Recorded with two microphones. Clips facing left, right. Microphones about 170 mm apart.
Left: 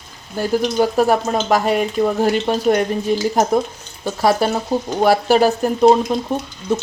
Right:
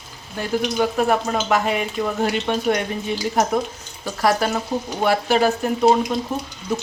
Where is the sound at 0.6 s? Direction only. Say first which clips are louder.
Left 3 dB; 35° left (ahead or behind).